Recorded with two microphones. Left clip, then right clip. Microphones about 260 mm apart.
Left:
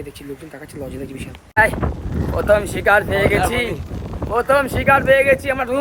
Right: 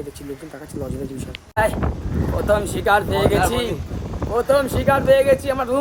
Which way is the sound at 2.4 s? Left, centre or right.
Centre.